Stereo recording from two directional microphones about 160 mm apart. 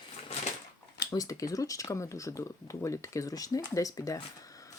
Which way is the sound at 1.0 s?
20° left (ahead or behind).